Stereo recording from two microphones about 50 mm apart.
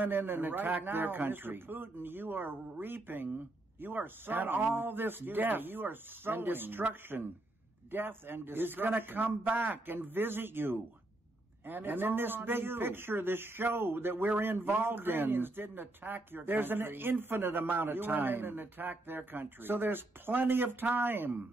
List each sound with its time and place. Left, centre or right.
0.0 s speech: right